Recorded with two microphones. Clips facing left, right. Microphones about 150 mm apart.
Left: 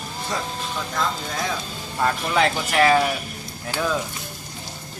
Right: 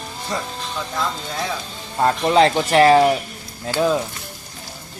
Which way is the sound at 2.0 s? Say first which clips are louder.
Right 6 dB; 30° right (ahead or behind).